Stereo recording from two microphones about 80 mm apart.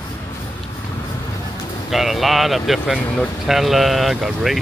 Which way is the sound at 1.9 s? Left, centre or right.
Centre.